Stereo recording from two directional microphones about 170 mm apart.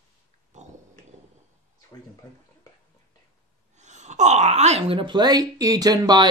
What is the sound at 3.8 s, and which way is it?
Speech, 45° right (ahead or behind).